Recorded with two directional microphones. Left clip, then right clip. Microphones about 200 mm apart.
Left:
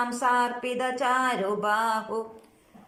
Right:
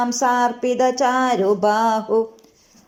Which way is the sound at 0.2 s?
35° right (ahead or behind).